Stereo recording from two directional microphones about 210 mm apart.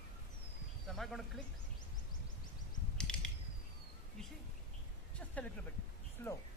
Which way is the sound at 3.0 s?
5° left (ahead or behind).